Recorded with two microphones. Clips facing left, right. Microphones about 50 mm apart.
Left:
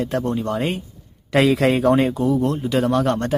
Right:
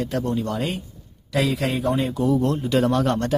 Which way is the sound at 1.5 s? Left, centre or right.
Left.